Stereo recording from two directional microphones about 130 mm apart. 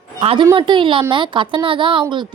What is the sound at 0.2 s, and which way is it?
A woman's voice, 50° right (ahead or behind).